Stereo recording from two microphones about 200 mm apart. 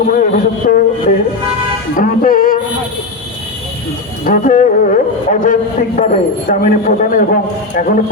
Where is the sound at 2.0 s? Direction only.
45° left (ahead or behind).